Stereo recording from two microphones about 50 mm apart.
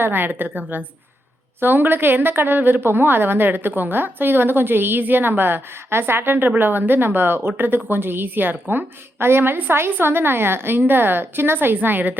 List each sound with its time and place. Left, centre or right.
0.0 s a woman's voice: right